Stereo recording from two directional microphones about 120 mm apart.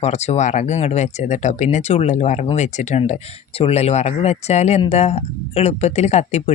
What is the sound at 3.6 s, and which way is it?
Speech, 60° left (ahead or behind).